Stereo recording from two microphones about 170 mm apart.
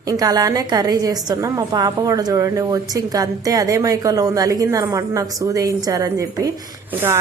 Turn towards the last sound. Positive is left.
turn(degrees=-15)  # may be behind; listen again after turning